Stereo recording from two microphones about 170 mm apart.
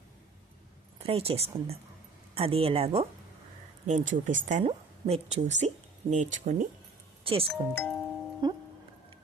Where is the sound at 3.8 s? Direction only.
45° right (ahead or behind).